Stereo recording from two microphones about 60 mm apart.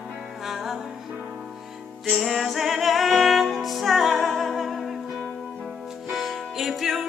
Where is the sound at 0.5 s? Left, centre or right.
Centre.